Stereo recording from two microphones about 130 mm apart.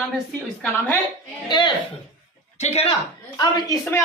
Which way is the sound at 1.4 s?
35° left (ahead or behind).